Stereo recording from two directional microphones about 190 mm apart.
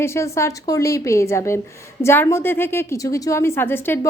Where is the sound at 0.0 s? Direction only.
15° left (ahead or behind).